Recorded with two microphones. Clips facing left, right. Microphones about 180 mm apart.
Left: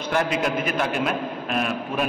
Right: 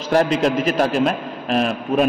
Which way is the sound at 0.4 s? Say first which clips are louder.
Right 6 dB; 30° right (ahead or behind).